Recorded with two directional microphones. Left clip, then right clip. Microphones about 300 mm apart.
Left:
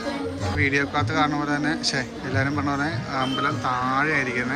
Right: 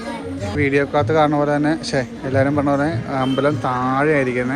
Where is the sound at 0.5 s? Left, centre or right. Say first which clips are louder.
Right 6 dB; centre.